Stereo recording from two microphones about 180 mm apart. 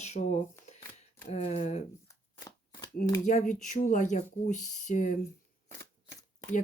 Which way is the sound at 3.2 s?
45° left (ahead or behind).